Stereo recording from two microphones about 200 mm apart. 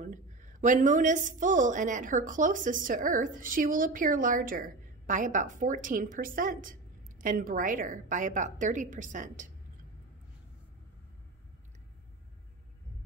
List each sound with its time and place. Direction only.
0.0 s a woman's voice: 40° right (ahead or behind)